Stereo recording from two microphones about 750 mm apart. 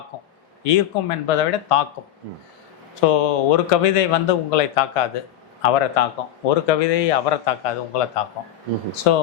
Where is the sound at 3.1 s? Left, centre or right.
Left.